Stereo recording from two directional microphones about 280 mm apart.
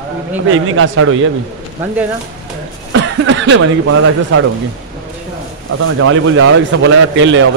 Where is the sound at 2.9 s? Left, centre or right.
Right.